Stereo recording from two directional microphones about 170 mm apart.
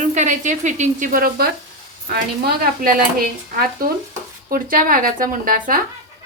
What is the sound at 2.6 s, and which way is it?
A woman's voice, 60° right (ahead or behind).